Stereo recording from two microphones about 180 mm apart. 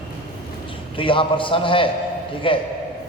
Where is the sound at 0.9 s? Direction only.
30° left (ahead or behind).